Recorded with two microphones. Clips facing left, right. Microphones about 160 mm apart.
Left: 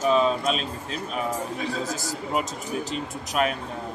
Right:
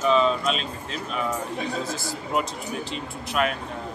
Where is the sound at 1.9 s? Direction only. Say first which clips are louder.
Even; 40° left (ahead or behind).